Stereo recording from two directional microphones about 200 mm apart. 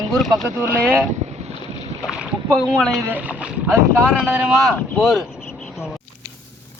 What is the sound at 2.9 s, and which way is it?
Speech, 10° right (ahead or behind).